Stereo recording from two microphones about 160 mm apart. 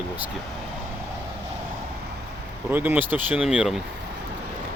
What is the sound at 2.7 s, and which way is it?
Speech, 10° right (ahead or behind).